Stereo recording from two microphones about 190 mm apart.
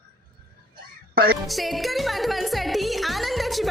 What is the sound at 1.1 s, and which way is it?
Music, 50° right (ahead or behind).